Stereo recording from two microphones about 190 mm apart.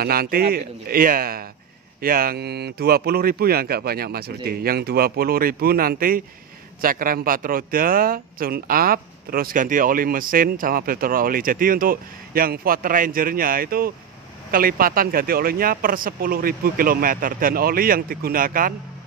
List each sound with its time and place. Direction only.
0.0 s speech: 50° right (ahead or behind)